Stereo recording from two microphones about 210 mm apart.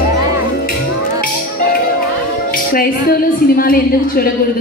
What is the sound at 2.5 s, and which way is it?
A woman's voice, 45° left (ahead or behind).